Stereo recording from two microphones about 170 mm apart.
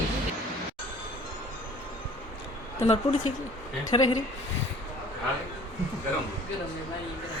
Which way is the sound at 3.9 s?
25° left (ahead or behind).